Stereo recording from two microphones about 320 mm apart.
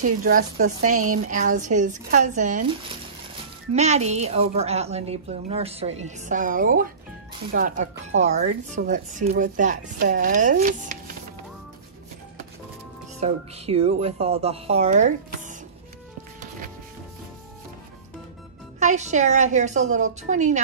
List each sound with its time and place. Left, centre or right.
0.0 s a woman's voice: right
0.9 s speech: right
1.2 s a woman's voice: right
3.7 s a woman's voice: right
13.2 s a woman's voice: centre
16.3 s music: right
18.8 s a woman's voice: right